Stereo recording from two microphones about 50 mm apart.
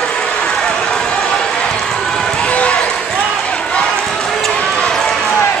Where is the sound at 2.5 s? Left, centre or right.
Left.